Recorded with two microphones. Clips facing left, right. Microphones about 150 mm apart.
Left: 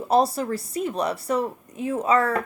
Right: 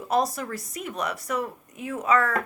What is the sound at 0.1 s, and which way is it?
A woman's voice, 30° left (ahead or behind).